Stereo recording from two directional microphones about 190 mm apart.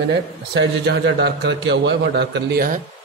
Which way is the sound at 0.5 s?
60° right (ahead or behind).